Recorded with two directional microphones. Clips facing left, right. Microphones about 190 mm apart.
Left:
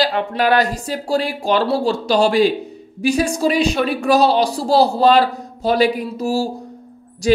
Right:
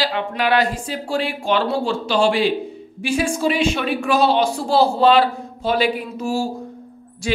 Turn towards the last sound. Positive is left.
turn(degrees=40)  # may be behind; listen again after turning